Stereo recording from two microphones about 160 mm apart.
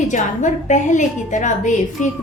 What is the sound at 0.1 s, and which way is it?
A woman's voice, 50° left (ahead or behind).